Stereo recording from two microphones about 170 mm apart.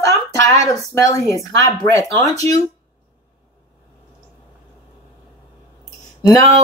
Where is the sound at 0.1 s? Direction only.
20° left (ahead or behind).